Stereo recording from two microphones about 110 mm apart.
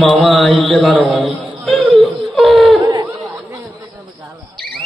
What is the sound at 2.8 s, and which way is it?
Laughter, 45° right (ahead or behind).